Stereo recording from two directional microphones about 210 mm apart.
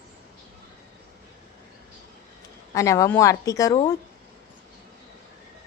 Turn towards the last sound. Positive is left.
turn(degrees=15)  # may be behind; listen again after turning